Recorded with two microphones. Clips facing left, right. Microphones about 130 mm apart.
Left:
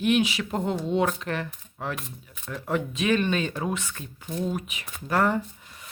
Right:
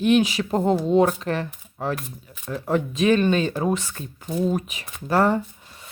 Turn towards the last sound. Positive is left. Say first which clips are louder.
# right 4 dB
turn(degrees=-35)  # may be behind; listen again after turning